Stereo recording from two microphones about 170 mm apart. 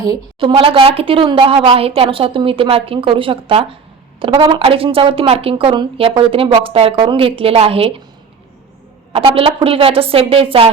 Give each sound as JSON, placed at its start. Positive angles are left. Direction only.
{"t": 0.0, "sound": "a woman's voice", "side_deg": -25}
{"t": 9.1, "sound": "a woman's voice", "side_deg": -35}